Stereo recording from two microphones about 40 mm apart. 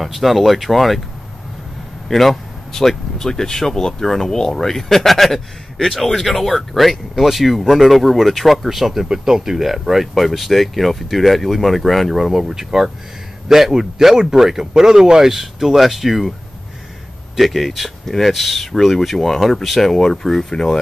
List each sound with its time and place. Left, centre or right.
0.0 s speech: centre
2.0 s speech: centre
17.4 s speech: centre